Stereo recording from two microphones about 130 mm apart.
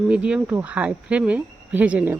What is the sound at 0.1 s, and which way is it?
Speech, 10° right (ahead or behind).